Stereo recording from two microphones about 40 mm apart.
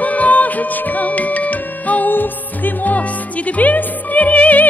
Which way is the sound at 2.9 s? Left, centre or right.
Left.